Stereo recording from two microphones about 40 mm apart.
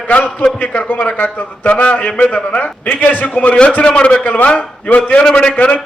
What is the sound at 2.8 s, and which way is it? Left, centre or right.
Speech, left.